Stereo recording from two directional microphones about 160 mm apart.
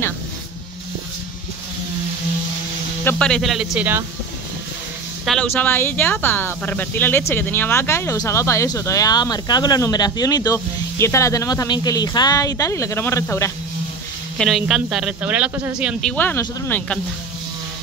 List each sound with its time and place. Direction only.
3.0 s speech: 10° left (ahead or behind); by 4.0 s 10° right (ahead or behind)
5.2 s speech: centre (ahead or behind)
5.5 s speech: 15° left (ahead or behind)
14.4 s speech: centre (ahead or behind)
16.0 s speech: 10° left (ahead or behind)